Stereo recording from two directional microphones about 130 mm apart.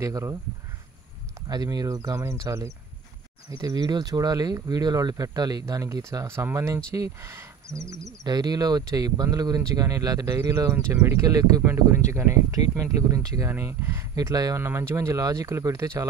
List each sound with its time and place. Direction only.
0.0 s speech: 20° right (ahead or behind)
1.5 s speech: 30° right (ahead or behind)